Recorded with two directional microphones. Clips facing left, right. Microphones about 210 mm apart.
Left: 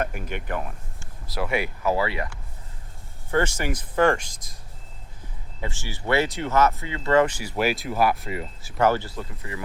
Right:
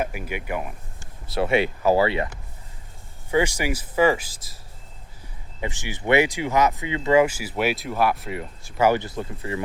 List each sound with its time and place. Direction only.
0.0 s speech: 5° right (ahead or behind)
0.9 s speech: 25° right (ahead or behind)
3.3 s speech: 10° right (ahead or behind)
5.5 s speech: 15° right (ahead or behind); by 8.9 s centre (ahead or behind)
8.9 s speech: 20° right (ahead or behind)